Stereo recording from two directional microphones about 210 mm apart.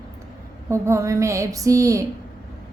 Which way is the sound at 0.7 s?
15° right (ahead or behind).